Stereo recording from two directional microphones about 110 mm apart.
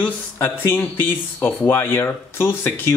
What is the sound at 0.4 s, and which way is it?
Speech, 20° left (ahead or behind).